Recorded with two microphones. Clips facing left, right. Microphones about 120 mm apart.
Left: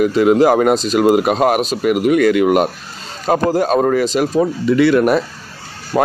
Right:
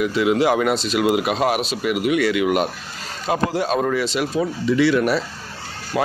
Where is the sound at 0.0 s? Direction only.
45° left (ahead or behind).